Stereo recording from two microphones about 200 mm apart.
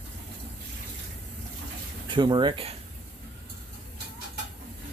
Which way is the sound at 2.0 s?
25° right (ahead or behind).